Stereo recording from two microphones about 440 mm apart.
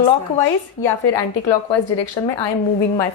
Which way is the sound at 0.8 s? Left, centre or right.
Left.